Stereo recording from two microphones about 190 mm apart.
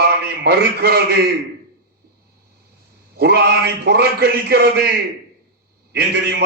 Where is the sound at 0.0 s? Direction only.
55° right (ahead or behind).